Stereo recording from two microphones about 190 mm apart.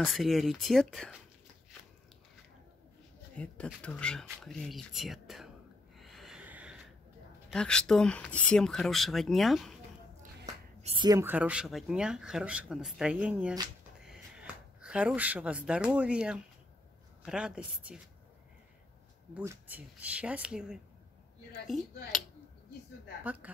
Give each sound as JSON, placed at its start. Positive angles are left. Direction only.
{"t": 0.0, "sound": "speech", "side_deg": 0}
{"t": 3.3, "sound": "speech", "side_deg": 5}
{"t": 5.9, "sound": "snort", "side_deg": 0}
{"t": 7.5, "sound": "speech", "side_deg": 5}
{"t": 10.8, "sound": "a sound", "side_deg": -30}
{"t": 11.1, "sound": "a woman's voice", "side_deg": -15}
{"t": 19.3, "sound": "speech", "side_deg": -10}
{"t": 23.2, "sound": "speech", "side_deg": -10}